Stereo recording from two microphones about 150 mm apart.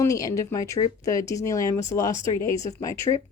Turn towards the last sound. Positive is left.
turn(degrees=25)  # may be behind; listen again after turning